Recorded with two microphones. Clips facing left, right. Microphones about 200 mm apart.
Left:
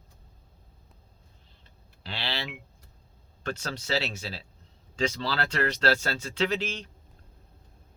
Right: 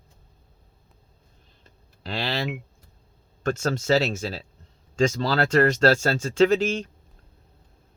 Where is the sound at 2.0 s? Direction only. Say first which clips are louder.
Right 7 dB; 45° right (ahead or behind).